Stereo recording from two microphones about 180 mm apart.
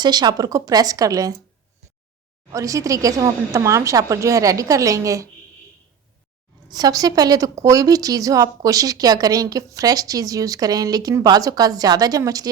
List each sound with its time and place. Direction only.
0.0 s speech: 25° right (ahead or behind)
2.5 s a woman's voice: 20° right (ahead or behind)
6.7 s speech: 20° right (ahead or behind)